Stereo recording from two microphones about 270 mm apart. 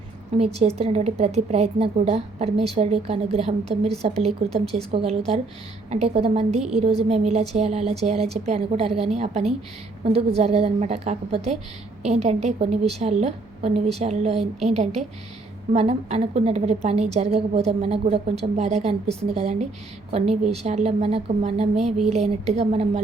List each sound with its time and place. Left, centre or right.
0.3 s a woman's voice: right